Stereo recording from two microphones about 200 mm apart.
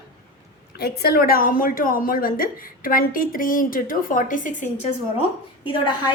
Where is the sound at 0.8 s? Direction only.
55° left (ahead or behind).